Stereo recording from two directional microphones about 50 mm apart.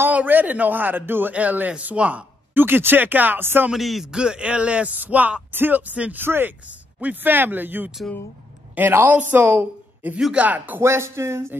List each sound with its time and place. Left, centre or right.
0.1 s a man's voice: right
2.5 s a man's voice: right
3.7 s speech: centre
4.1 s a man's voice: centre
6.1 s a man's voice: right
10.8 s speech: right